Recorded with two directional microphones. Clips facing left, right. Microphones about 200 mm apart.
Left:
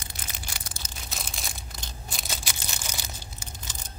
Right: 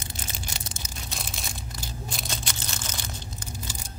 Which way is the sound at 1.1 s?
Centre (ahead or behind).